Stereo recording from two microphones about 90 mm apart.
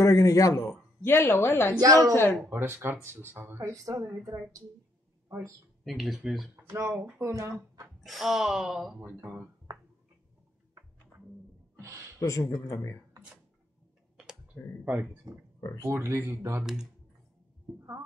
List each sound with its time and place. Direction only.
0.0 s a man's voice: 35° left (ahead or behind)
0.7 s a woman's voice: 25° left (ahead or behind)
1.8 s speech: 40° right (ahead or behind)
2.5 s speech: 25° right (ahead or behind)
3.7 s speech: 35° right (ahead or behind)
5.9 s speech: centre (ahead or behind)
6.7 s speech: 40° right (ahead or behind)
8.0 s speech: centre (ahead or behind)
9.0 s speech: 25° right (ahead or behind)
9.7 s a sound: 30° right (ahead or behind)
12.2 s a man's voice: 40° left (ahead or behind)
14.5 s speech: 15° left (ahead or behind)
15.3 s speech: 45° right (ahead or behind)
15.8 s speech: 30° right (ahead or behind)